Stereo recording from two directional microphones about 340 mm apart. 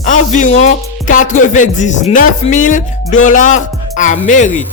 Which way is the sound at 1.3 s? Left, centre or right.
Left.